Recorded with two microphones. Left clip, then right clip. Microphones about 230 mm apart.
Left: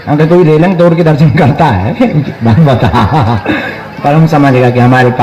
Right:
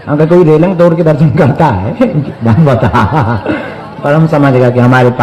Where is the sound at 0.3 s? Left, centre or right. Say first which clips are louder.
Even; left.